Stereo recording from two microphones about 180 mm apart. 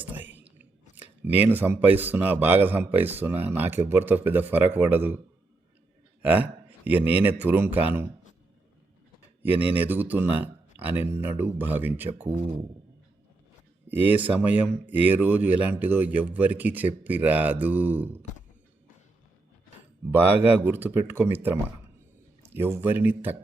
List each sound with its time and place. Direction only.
0.0 s whispering: 10° right (ahead or behind)
0.6 s speech: 10° right (ahead or behind)
6.2 s speech: 10° right (ahead or behind)
9.7 s speech: 10° right (ahead or behind)
13.8 s speech: 10° right (ahead or behind)
20.1 s speech: 10° right (ahead or behind)